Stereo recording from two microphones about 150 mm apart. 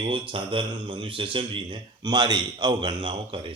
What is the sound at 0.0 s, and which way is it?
A man's voice, 35° right (ahead or behind).